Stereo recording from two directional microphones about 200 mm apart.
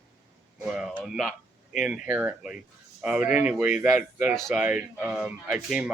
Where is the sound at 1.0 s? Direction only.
Centre (ahead or behind).